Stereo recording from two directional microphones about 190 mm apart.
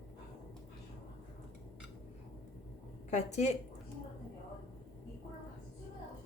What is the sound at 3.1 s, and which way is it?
Speech, 35° left (ahead or behind).